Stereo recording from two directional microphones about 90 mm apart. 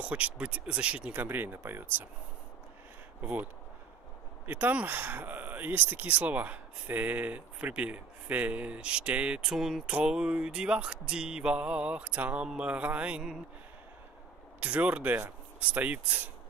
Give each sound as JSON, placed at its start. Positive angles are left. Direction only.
{"t": 0.0, "sound": "speech", "side_deg": -15}
{"t": 3.2, "sound": "speech", "side_deg": -15}
{"t": 4.5, "sound": "speech", "side_deg": -20}
{"t": 14.6, "sound": "speech", "side_deg": -15}